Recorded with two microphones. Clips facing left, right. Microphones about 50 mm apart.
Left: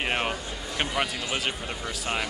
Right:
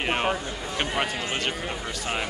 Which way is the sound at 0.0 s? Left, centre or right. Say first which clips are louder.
Right 2 dB; centre.